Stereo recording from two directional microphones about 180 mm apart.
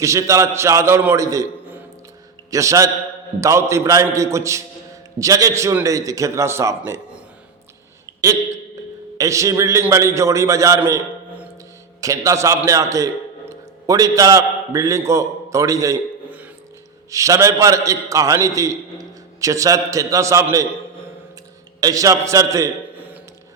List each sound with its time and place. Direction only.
0.0 s a man's voice: 15° right (ahead or behind)
9.1 s a man's voice: 15° right (ahead or behind)
10.8 s a sound: 10° right (ahead or behind)
11.9 s a man's voice: 20° right (ahead or behind)
21.8 s a man's voice: 20° right (ahead or behind)